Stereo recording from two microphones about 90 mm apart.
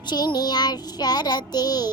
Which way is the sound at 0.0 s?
55° left (ahead or behind).